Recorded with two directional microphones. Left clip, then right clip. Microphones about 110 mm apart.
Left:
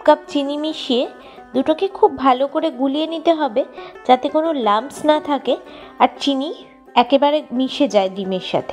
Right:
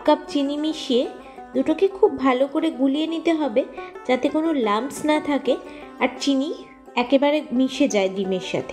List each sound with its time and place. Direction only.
0.0 s speech: 30° left (ahead or behind)
6.9 s a woman's voice: 40° left (ahead or behind)